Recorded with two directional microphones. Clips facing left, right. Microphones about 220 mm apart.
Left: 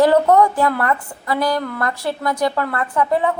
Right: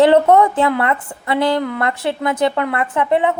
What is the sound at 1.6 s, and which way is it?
A woman's voice, 15° right (ahead or behind).